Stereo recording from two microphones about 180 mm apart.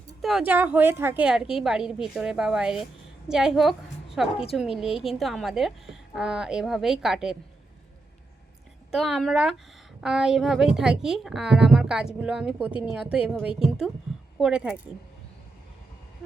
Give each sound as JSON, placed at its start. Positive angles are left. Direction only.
{"t": 0.2, "sound": "a woman's voice", "side_deg": 0}
{"t": 8.9, "sound": "a woman's voice", "side_deg": 0}